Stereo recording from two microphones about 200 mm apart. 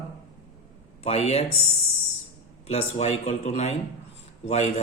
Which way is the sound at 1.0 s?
30° left (ahead or behind).